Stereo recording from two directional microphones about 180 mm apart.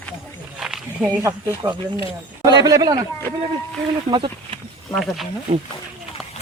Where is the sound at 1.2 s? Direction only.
15° right (ahead or behind).